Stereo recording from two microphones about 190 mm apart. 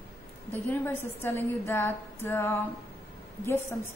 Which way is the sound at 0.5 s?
10° left (ahead or behind).